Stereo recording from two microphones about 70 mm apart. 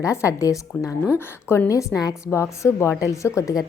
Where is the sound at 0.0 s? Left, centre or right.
Left.